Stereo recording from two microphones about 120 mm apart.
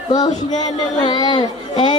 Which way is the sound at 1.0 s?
45° left (ahead or behind).